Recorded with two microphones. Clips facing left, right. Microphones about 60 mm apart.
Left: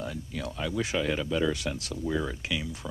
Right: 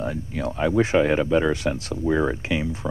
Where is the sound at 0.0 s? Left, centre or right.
Right.